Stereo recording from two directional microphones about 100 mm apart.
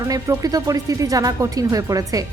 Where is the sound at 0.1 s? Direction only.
35° right (ahead or behind).